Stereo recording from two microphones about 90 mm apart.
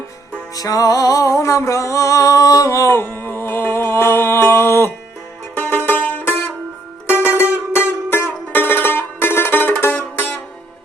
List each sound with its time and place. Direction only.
0.5 s music: 40° left (ahead or behind); by 10.2 s 20° left (ahead or behind)